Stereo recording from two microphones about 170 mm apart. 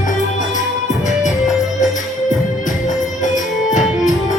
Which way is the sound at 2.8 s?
50° left (ahead or behind).